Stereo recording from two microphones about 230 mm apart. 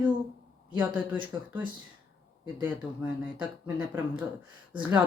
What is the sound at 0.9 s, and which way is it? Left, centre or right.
Speech, centre.